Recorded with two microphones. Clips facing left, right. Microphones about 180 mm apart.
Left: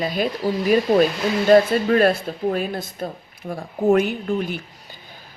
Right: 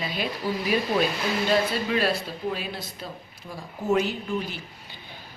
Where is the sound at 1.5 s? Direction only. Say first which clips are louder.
Left 11 dB; 50° left (ahead or behind).